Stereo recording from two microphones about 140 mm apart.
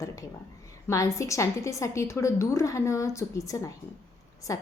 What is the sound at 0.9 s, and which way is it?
A woman's voice, 20° left (ahead or behind).